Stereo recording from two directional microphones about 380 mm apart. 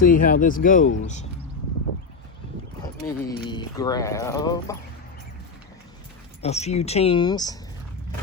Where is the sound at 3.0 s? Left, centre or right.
Centre.